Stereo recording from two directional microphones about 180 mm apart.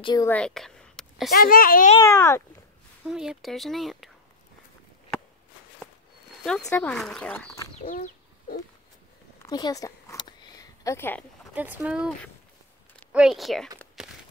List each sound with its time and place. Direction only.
0.0 s a woman's voice: 20° left (ahead or behind)
0.3 s a sound: 5° left (ahead or behind)
1.3 s a child's voice: 55° left (ahead or behind)
2.0 s speech: 15° left (ahead or behind)
3.1 s speech: 5° right (ahead or behind)
6.7 s speech: 5° left (ahead or behind)
7.8 s bird: 50° left (ahead or behind)
9.4 s a sound: 20° left (ahead or behind)
11.5 s speech: 10° right (ahead or behind)
13.1 s speech: 5° right (ahead or behind)